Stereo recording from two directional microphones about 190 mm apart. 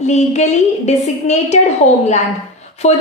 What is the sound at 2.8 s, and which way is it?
Speech, 35° left (ahead or behind).